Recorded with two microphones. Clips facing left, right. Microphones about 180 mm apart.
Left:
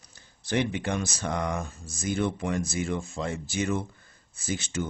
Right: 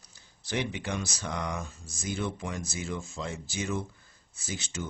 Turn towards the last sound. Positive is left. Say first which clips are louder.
# left 6 dB
turn(degrees=55)  # may be behind; listen again after turning